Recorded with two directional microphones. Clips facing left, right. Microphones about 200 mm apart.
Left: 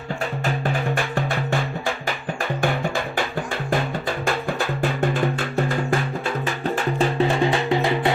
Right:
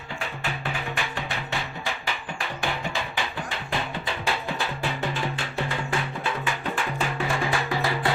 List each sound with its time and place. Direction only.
0.4 s music: 45° left (ahead or behind); by 8.1 s 20° left (ahead or behind)